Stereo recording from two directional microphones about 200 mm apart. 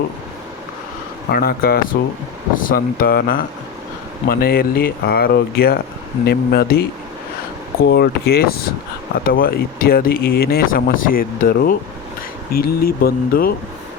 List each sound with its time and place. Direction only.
1.3 s speech: 50° left (ahead or behind)
7.9 s speech: 55° left (ahead or behind)